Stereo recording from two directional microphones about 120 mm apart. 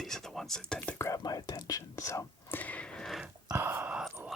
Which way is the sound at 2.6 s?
10° left (ahead or behind).